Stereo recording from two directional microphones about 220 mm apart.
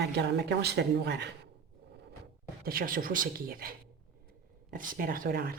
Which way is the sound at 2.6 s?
40° right (ahead or behind).